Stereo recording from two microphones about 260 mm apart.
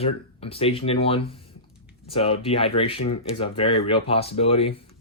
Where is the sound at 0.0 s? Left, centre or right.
Left.